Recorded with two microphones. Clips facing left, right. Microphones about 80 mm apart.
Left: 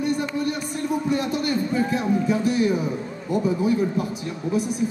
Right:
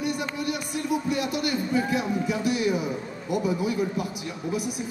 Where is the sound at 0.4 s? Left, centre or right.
Left.